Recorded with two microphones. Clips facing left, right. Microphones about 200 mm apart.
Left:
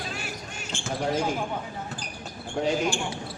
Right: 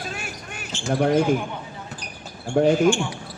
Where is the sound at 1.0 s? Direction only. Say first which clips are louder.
Right 8 dB; 60° right (ahead or behind).